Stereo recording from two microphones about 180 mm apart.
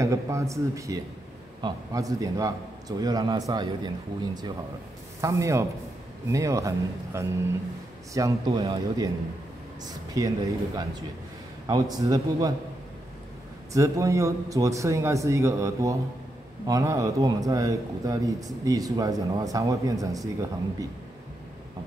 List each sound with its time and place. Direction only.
0.0 s a man's voice: 15° right (ahead or behind)
13.7 s a man's voice: 20° right (ahead or behind)